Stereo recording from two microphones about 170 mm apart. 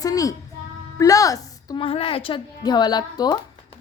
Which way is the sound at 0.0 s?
20° left (ahead or behind).